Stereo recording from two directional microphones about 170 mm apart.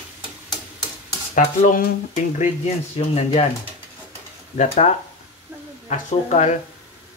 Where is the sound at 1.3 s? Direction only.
45° left (ahead or behind).